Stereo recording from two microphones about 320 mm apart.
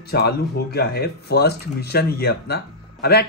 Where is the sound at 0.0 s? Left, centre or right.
Left.